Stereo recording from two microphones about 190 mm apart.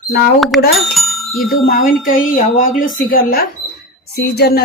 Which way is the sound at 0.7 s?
Centre (ahead or behind).